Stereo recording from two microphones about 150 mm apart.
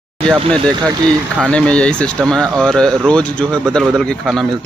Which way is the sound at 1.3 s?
10° left (ahead or behind).